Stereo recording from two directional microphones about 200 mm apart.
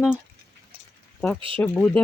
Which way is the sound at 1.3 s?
25° right (ahead or behind).